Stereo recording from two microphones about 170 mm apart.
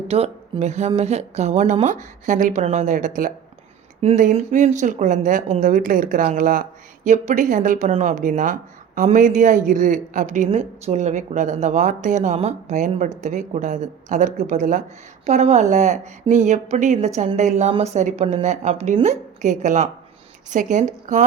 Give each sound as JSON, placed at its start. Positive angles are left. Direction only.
{"t": 0.1, "sound": "a woman's voice", "side_deg": -35}